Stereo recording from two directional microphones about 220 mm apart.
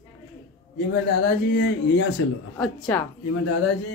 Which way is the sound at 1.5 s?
50° left (ahead or behind).